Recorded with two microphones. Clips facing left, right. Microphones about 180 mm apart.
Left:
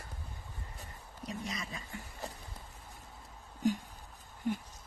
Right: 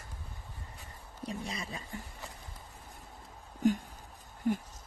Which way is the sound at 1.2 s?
30° right (ahead or behind).